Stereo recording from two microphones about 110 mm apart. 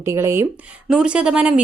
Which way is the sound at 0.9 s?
5° right (ahead or behind).